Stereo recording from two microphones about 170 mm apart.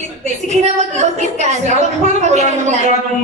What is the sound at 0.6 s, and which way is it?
Speech, 40° right (ahead or behind).